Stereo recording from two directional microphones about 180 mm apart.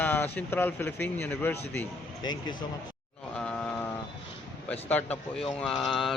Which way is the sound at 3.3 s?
10° left (ahead or behind).